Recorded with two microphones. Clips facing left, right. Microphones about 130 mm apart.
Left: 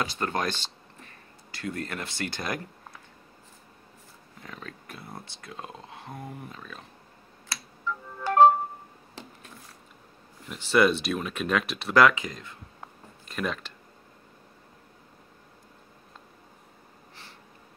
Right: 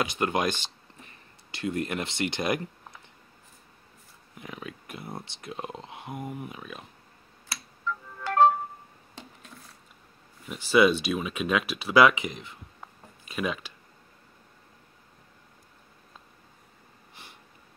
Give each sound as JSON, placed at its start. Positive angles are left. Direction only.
{"t": 0.0, "sound": "speech", "side_deg": -15}
{"t": 4.4, "sound": "speech", "side_deg": -15}
{"t": 7.8, "sound": "music", "side_deg": 10}
{"t": 10.5, "sound": "speech", "side_deg": -5}
{"t": 13.2, "sound": "speech", "side_deg": -5}
{"t": 17.1, "sound": "snort", "side_deg": -15}